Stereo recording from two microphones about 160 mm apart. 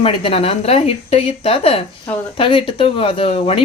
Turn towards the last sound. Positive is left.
turn(degrees=40)  # may be behind; listen again after turning